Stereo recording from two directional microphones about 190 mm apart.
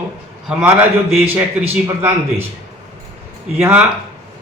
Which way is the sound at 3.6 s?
5° right (ahead or behind).